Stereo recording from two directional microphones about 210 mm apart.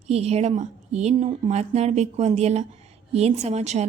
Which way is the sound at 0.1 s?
30° right (ahead or behind).